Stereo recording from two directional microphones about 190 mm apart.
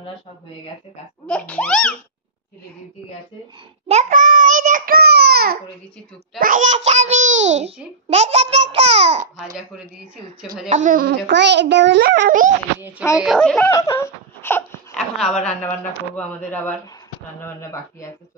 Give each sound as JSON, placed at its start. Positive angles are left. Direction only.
{"t": 1.2, "sound": "speech", "side_deg": 5}
{"t": 3.8, "sound": "a child's voice", "side_deg": -35}
{"t": 6.4, "sound": "a child's voice", "side_deg": -40}
{"t": 10.7, "sound": "speech", "side_deg": -40}
{"t": 11.2, "sound": "a child's voice", "side_deg": -65}
{"t": 13.2, "sound": "speech", "side_deg": 0}
{"t": 13.7, "sound": "whimper", "side_deg": 15}
{"t": 15.4, "sound": "speech", "side_deg": 10}